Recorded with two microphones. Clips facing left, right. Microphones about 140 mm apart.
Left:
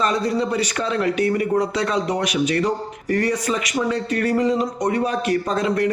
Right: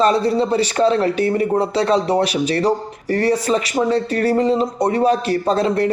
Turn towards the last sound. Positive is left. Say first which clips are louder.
# right 3 dB
turn(degrees=-35)  # may be behind; listen again after turning